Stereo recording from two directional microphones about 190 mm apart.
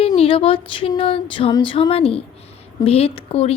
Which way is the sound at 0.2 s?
30° left (ahead or behind).